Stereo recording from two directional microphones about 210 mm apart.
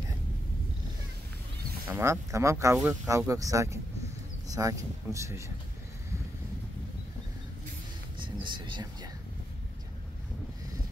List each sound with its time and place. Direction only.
1.9 s speech: 15° right (ahead or behind)
8.2 s speech: 20° right (ahead or behind)